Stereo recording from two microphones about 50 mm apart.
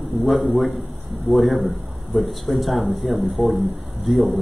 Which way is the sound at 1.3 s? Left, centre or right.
Centre.